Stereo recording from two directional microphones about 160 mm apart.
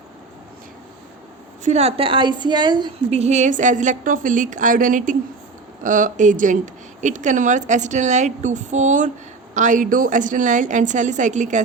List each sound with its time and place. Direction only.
1.6 s a woman's voice: 45° right (ahead or behind); by 2.9 s 25° right (ahead or behind)
3.1 s a woman's voice: 40° right (ahead or behind)